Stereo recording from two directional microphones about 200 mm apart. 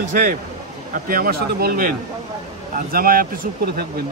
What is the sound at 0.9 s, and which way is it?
Speech, 45° right (ahead or behind).